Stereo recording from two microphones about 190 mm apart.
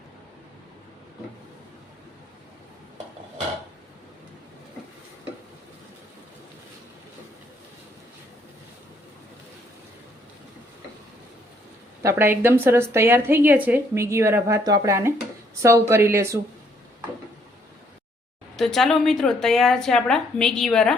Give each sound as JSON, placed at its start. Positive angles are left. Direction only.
{"t": 12.0, "sound": "a woman's voice", "side_deg": -10}
{"t": 18.5, "sound": "a woman's voice", "side_deg": 0}